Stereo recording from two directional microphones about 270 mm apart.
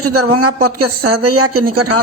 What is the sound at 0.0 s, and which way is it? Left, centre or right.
Speech, right.